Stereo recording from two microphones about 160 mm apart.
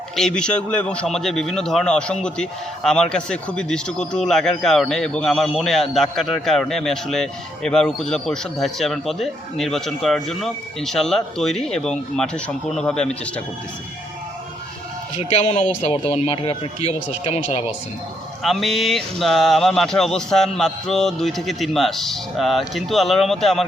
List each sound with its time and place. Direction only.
0.2 s a man's voice: 5° left (ahead or behind)
15.3 s speech: 40° left (ahead or behind)
18.4 s a man's voice: centre (ahead or behind)